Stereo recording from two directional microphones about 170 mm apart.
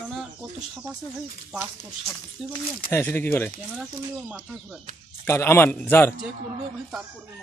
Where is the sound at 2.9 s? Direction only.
15° left (ahead or behind).